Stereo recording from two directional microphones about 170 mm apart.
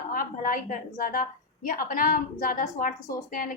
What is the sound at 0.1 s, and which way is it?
A woman's voice, 55° left (ahead or behind).